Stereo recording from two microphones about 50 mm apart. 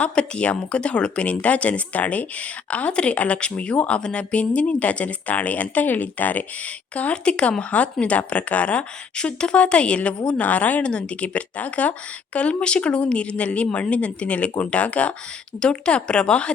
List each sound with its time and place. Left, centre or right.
0.0 s a woman's voice: left
6.9 s a woman's voice: left